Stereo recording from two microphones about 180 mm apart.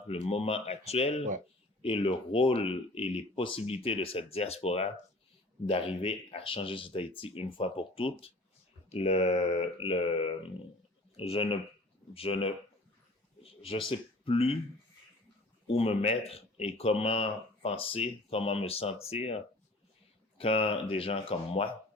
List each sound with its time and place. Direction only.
0.1 s speech: 35° left (ahead or behind)
15.6 s speech: 30° left (ahead or behind)
20.4 s speech: 30° left (ahead or behind)